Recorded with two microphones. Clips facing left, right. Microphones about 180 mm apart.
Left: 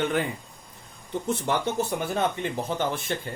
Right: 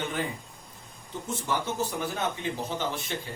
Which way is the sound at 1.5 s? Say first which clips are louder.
Left 3 dB; 65° left (ahead or behind).